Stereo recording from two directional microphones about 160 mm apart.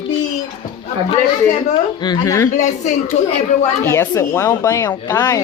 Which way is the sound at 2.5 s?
50° left (ahead or behind).